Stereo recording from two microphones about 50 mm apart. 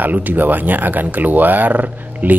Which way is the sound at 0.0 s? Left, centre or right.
Right.